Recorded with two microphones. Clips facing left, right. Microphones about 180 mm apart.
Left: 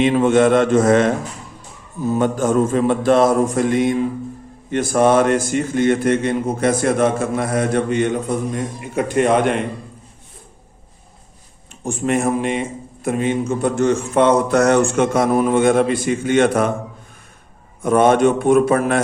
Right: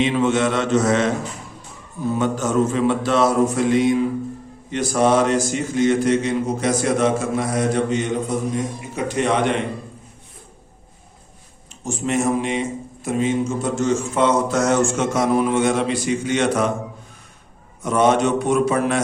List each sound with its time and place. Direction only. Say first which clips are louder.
0.0 s mantra: left 5 dB; 50° left (ahead or behind)
2.1 s mantra: left 3 dB; 50° left (ahead or behind)
4.7 s a man's voice: left 3 dB; 55° left (ahead or behind)
8.8 s mantra: left 9 dB; 55° left (ahead or behind)
11.8 s a man's voice: left 2 dB; 55° left (ahead or behind)
17.8 s mantra: left 4 dB; 55° left (ahead or behind)